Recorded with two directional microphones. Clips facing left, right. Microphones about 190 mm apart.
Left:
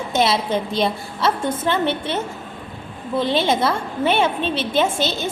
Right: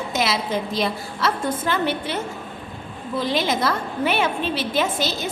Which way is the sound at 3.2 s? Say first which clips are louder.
Left 3 dB; 25° left (ahead or behind).